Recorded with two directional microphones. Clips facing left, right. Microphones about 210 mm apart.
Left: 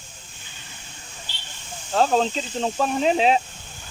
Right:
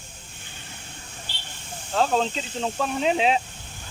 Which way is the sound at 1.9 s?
40° left (ahead or behind).